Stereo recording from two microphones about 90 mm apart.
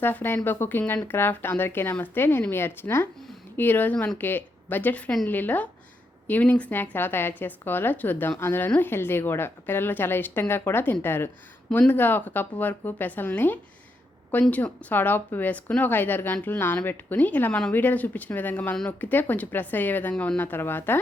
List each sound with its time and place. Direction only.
0.0 s a woman's voice: 20° left (ahead or behind)
3.9 s speech: 10° left (ahead or behind)
4.2 s a woman's voice: 20° left (ahead or behind)